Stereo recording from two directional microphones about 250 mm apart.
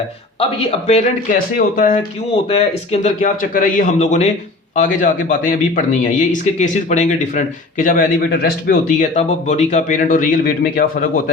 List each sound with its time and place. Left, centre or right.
0.3 s a man's voice: left